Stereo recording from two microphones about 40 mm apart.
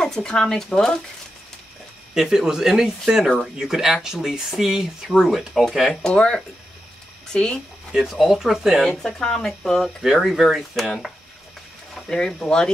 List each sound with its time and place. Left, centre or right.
0.0 s speech: centre
2.1 s speech: centre
6.0 s speech: left
7.9 s speech: centre
8.8 s speech: centre
10.0 s speech: centre
12.1 s speech: centre